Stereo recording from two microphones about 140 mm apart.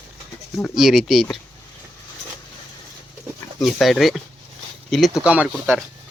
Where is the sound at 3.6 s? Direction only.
Centre (ahead or behind).